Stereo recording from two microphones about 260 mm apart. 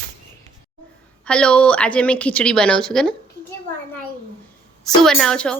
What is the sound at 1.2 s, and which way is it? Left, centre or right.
A woman's voice, centre.